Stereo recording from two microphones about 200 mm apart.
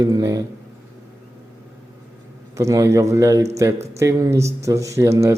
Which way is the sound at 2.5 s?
15° right (ahead or behind).